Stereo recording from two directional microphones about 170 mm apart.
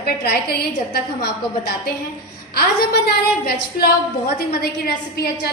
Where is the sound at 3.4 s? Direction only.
65° left (ahead or behind).